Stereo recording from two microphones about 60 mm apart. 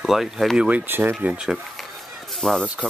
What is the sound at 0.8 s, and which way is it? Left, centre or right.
Speech, right.